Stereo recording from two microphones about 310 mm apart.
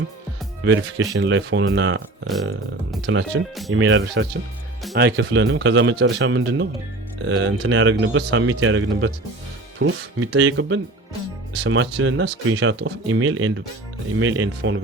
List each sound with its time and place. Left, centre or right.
0.6 s speech: right
3.1 s speech: right